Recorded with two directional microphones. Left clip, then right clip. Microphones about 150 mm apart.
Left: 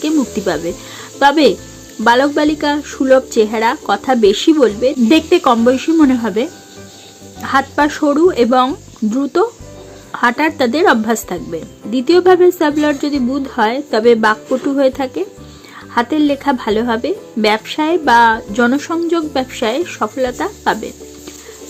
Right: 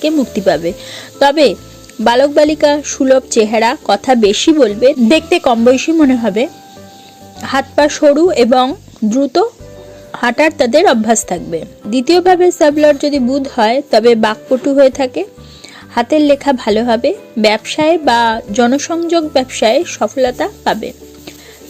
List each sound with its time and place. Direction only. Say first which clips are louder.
0.0 s speech: right 4 dB; 30° right (ahead or behind)